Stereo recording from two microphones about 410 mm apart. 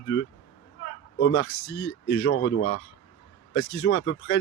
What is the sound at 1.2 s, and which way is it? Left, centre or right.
Speech, left.